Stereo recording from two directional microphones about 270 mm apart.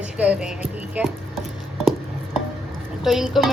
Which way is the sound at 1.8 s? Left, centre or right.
Centre.